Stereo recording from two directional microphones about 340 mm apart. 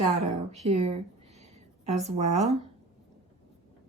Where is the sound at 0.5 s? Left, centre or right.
Centre.